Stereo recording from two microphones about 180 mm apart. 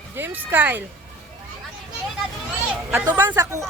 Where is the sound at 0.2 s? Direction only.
10° right (ahead or behind).